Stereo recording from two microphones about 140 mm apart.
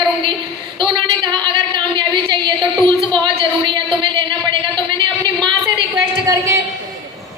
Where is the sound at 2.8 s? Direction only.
35° right (ahead or behind).